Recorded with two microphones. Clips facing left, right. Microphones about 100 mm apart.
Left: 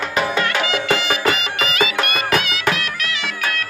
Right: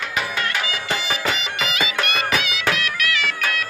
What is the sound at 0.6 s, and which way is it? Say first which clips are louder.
Music: left 6 dB; 65° left (ahead or behind).